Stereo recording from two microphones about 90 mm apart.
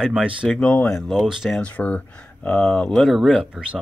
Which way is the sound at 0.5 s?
10° left (ahead or behind).